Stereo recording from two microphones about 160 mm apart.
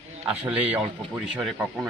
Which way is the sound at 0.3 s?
10° right (ahead or behind).